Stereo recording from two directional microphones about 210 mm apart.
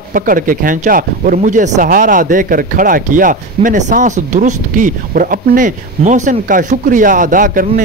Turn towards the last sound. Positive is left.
turn(degrees=-40)  # may be behind; listen again after turning